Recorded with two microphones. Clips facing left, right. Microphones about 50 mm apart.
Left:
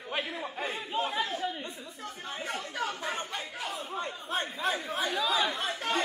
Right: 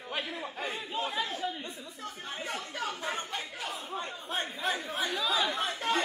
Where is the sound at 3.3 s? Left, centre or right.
Centre.